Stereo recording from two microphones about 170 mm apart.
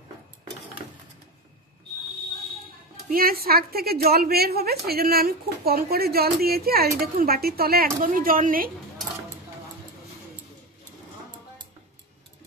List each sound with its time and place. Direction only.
3.1 s speech: 60° right (ahead or behind)